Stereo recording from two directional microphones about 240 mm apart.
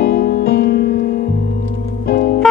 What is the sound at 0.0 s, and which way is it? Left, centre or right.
Music, left.